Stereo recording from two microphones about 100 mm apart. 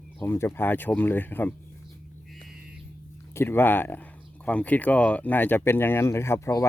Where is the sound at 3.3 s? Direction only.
25° left (ahead or behind).